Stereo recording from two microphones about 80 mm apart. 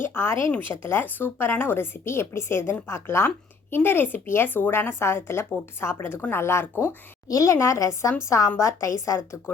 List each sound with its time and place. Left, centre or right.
0.0 s a woman's voice: left
7.3 s a woman's voice: left